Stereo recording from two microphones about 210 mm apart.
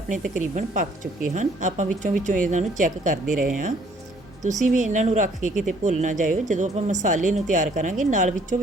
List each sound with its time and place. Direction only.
0.1 s speech: 35° right (ahead or behind)